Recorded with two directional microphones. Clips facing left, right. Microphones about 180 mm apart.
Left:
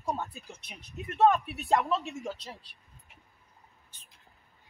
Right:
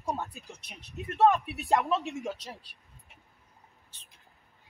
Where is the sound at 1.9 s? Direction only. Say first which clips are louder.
Right 1 dB; 15° right (ahead or behind).